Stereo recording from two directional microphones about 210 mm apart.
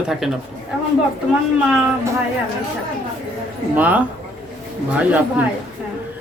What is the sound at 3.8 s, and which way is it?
A man's voice, 5° right (ahead or behind).